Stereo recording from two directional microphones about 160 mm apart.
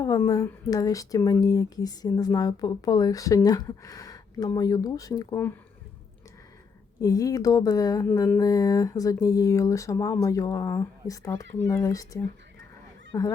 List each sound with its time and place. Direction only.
0.0 s speech: 20° left (ahead or behind)
7.0 s speech: 20° left (ahead or behind)